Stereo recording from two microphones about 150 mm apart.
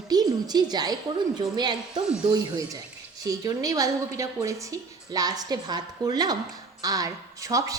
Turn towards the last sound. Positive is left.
turn(degrees=-20)  # may be behind; listen again after turning